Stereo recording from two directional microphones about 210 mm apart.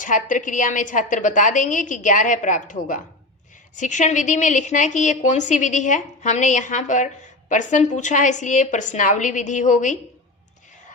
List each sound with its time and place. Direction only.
0.0 s a woman's voice: 40° left (ahead or behind)